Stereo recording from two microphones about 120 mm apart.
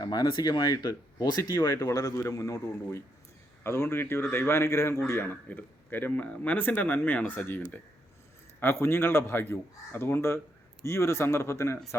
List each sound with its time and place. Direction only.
0.0 s speech: 35° left (ahead or behind); by 7.6 s 15° left (ahead or behind)
8.6 s speech: 20° left (ahead or behind)